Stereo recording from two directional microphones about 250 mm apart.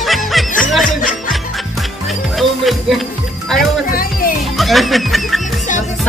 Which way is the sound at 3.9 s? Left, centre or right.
Left.